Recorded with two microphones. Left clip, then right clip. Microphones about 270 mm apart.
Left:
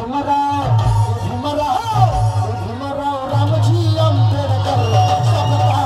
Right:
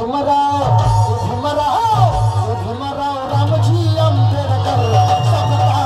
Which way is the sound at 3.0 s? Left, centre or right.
Centre.